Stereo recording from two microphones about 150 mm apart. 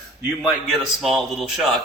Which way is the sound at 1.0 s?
Centre (ahead or behind).